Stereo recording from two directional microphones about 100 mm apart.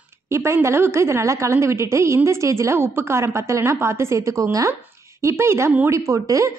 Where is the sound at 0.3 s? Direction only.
25° right (ahead or behind).